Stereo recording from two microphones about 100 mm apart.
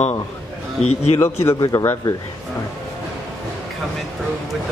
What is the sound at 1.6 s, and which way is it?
Speech, 40° left (ahead or behind).